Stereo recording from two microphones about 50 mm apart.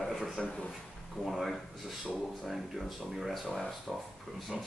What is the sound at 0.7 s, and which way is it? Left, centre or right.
Speech, centre.